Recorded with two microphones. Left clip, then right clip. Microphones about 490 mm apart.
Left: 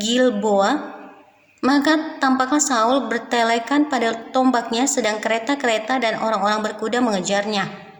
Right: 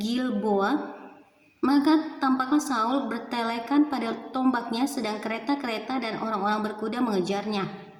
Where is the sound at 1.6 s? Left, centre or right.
Right.